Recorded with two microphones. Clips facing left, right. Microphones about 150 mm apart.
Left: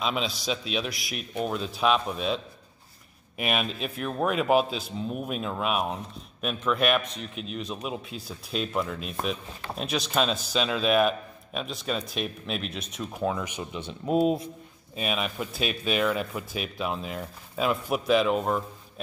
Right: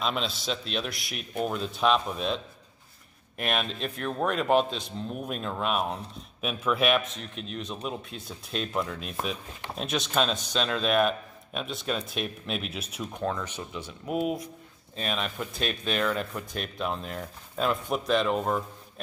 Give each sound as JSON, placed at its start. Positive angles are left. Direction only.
{"t": 0.0, "sound": "a man's voice", "side_deg": 5}
{"t": 13.2, "sound": "speech", "side_deg": 10}
{"t": 15.0, "sound": "a man's voice", "side_deg": 5}